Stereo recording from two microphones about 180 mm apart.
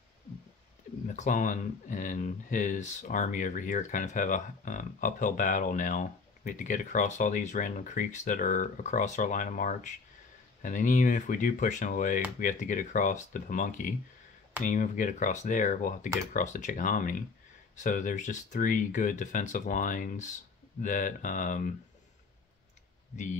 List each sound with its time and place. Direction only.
1.0 s speech: 45° left (ahead or behind)